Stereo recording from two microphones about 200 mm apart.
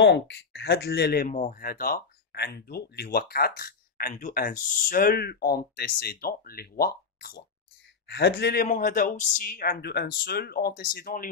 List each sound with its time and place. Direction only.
0.0 s speech: 60° left (ahead or behind)